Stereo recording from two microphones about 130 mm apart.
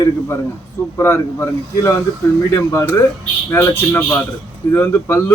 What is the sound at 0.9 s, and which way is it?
A man's voice, 20° left (ahead or behind).